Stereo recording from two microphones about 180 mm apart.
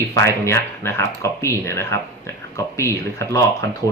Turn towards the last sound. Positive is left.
turn(degrees=15)  # may be behind; listen again after turning